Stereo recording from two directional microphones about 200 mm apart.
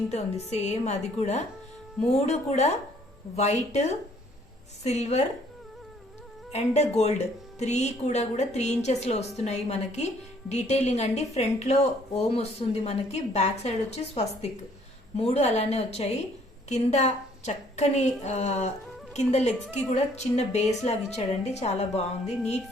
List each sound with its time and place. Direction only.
0.1 s a woman's voice: 35° left (ahead or behind)
6.5 s a woman's voice: 35° left (ahead or behind)